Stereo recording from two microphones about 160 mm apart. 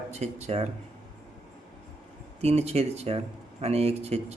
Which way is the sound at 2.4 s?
40° right (ahead or behind).